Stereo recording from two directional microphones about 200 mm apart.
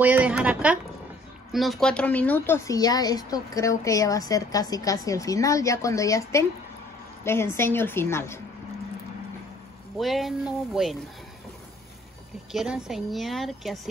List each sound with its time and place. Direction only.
0.0 s a sound: 10° right (ahead or behind)
1.5 s speech: centre (ahead or behind)
9.9 s a woman's voice: centre (ahead or behind)
12.5 s a woman's voice: 5° right (ahead or behind)